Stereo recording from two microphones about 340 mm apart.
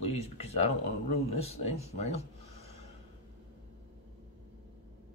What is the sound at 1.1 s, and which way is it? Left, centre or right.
Speech, centre.